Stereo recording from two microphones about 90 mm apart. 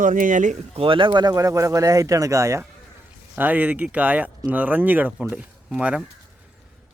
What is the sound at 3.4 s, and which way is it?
Speech, 20° right (ahead or behind).